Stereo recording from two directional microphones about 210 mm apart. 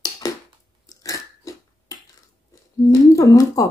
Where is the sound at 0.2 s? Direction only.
15° left (ahead or behind).